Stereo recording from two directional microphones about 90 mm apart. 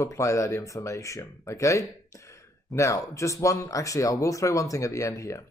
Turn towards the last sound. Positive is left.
turn(degrees=35)  # may be behind; listen again after turning